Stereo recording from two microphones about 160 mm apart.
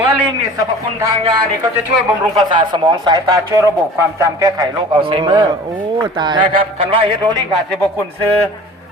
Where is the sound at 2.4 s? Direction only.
30° right (ahead or behind).